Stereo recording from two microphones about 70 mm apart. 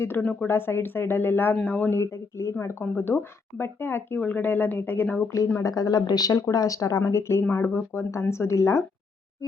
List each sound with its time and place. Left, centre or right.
0.2 s speech: left
0.4 s speech: left
1.9 s speech: left
5.0 s speech: centre
5.6 s speech: left
7.0 s speech: left
7.5 s speech: left
7.9 s speech: left